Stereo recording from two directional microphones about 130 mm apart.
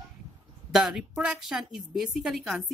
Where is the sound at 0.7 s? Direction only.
5° right (ahead or behind).